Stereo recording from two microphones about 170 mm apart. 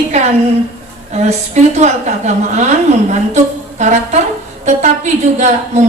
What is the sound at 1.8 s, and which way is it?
A woman's voice, 45° right (ahead or behind).